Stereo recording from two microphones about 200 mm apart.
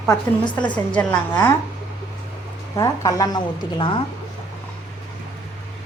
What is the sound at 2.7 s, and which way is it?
A woman's voice, 15° left (ahead or behind).